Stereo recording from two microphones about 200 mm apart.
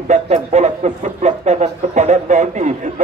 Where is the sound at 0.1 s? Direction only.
35° right (ahead or behind).